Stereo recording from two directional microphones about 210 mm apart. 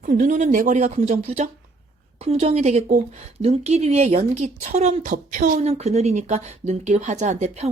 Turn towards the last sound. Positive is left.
turn(degrees=-30)  # may be behind; listen again after turning